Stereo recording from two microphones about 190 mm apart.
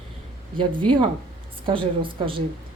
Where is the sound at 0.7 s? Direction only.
25° right (ahead or behind).